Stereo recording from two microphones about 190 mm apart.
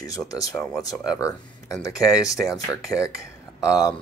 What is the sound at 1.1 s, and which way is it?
Speech, 15° left (ahead or behind).